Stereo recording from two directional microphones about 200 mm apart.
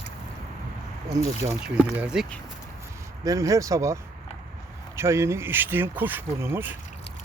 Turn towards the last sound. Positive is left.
turn(degrees=-10)  # may be behind; listen again after turning